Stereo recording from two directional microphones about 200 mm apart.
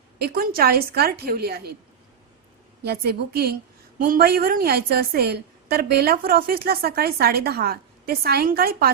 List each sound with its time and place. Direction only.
0.2 s a woman's voice: 50° right (ahead or behind)
2.8 s a woman's voice: 55° right (ahead or behind)